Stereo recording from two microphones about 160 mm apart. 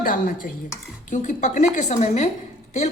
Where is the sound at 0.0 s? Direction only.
60° left (ahead or behind).